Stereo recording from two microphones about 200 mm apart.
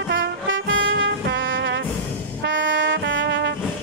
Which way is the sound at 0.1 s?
65° right (ahead or behind).